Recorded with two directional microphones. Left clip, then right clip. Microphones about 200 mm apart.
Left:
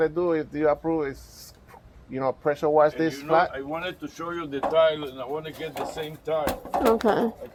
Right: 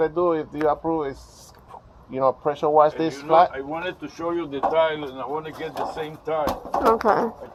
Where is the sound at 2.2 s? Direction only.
45° left (ahead or behind).